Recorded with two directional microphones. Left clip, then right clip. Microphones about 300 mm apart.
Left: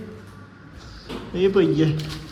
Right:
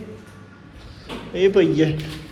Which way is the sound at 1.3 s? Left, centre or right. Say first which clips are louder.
Right 2 dB; centre.